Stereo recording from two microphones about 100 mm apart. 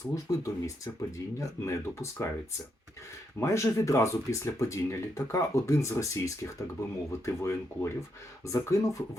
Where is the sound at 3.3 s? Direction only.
30° left (ahead or behind).